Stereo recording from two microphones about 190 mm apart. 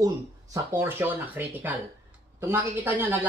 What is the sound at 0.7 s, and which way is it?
Speech, 10° right (ahead or behind).